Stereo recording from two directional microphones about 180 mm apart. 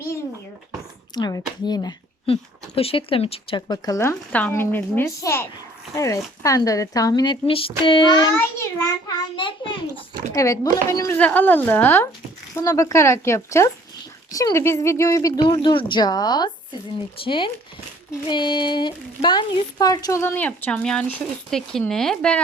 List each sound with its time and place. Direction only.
1.1 s speech: 20° left (ahead or behind)
2.3 s speech: 30° left (ahead or behind)
8.4 s a child's voice: 15° left (ahead or behind)
10.3 s speech: 20° left (ahead or behind)